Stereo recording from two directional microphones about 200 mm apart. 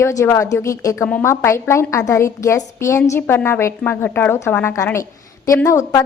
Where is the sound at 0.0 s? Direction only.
15° left (ahead or behind).